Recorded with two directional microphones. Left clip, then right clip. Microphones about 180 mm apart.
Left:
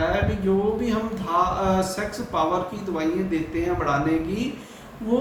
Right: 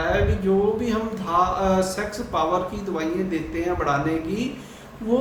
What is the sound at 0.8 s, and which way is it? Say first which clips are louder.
A man's voice: right 1 dB; 15° right (ahead or behind).